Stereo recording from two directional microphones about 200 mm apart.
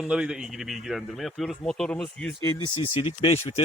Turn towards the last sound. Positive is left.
turn(degrees=30)  # may be behind; listen again after turning